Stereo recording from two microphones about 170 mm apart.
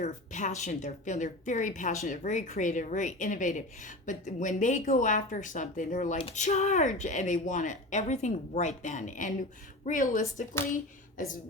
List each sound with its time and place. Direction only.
0.0 s a woman's voice: 45° left (ahead or behind)